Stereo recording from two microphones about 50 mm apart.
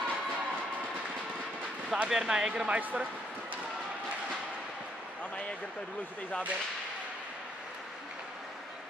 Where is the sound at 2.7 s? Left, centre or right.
Right.